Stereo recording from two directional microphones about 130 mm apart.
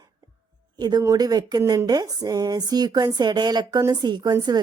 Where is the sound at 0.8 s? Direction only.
30° right (ahead or behind).